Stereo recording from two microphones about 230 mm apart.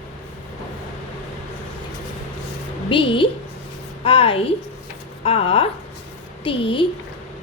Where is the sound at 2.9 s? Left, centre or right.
Left.